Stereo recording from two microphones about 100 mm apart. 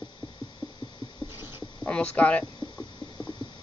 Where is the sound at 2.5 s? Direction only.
50° left (ahead or behind).